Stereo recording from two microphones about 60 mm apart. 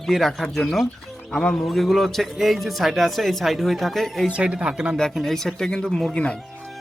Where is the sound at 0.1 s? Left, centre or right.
Centre.